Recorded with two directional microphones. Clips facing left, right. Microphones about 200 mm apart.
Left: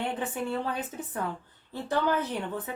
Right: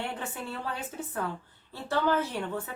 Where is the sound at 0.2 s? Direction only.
20° left (ahead or behind).